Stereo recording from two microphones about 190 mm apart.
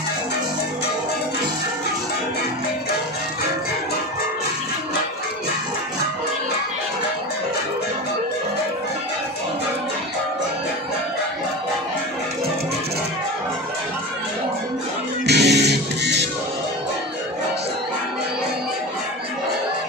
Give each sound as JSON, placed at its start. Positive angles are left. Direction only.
{"t": 15.2, "sound": "music", "side_deg": -60}